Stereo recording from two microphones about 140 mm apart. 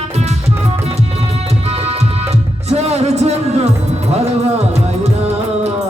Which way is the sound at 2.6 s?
50° right (ahead or behind).